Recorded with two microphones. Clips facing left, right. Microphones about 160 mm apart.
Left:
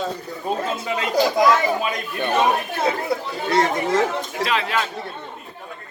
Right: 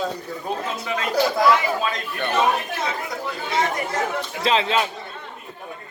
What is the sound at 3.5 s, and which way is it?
Speech, 90° left.